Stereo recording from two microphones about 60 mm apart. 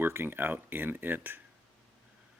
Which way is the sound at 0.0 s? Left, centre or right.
Right.